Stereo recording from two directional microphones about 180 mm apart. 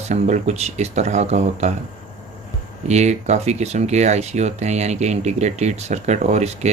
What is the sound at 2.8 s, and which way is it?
Speech, 40° right (ahead or behind).